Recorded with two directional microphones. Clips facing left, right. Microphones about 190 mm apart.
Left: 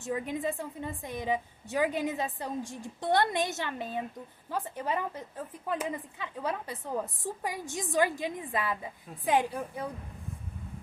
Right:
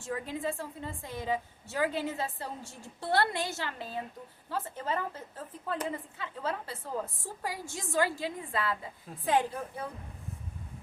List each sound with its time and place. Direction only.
0.0 s a woman's voice: 20° left (ahead or behind)